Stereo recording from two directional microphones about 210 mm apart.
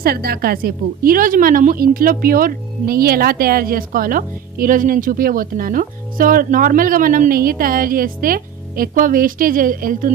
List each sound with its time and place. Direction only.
0.0 s a woman's voice: 45° right (ahead or behind)